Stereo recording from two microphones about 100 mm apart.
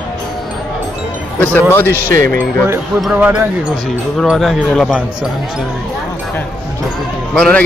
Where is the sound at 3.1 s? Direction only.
15° right (ahead or behind).